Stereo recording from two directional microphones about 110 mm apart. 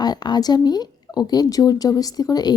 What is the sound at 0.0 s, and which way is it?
Speech, 40° left (ahead or behind).